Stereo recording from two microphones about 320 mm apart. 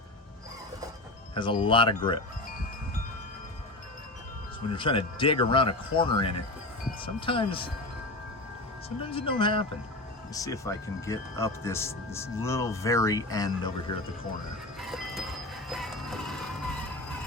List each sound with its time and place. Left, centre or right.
1.3 s speech: centre
4.7 s speech: centre
9.1 s speech: centre
14.8 s train: centre